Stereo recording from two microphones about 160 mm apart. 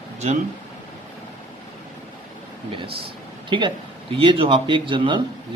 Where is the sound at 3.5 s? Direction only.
30° right (ahead or behind).